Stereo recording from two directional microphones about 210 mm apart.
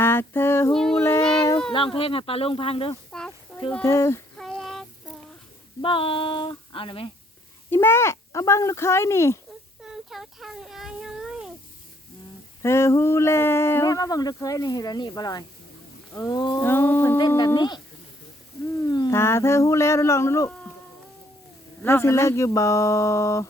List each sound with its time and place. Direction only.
0.0 s female singing: 10° left (ahead or behind)
0.9 s child singing: 10° left (ahead or behind)
2.0 s female singing: 25° left (ahead or behind)
3.1 s a sound: 5° left (ahead or behind)
3.7 s speech: 10° left (ahead or behind)
4.4 s child singing: centre (ahead or behind)
5.8 s female singing: 25° left (ahead or behind)
7.7 s speech: 10° left (ahead or behind)
9.8 s a sound: centre (ahead or behind)
12.6 s speech: 10° left (ahead or behind)
17.2 s female singing: 20° left (ahead or behind)
18.9 s speech: 20° left (ahead or behind)
21.8 s speech: 10° left (ahead or behind)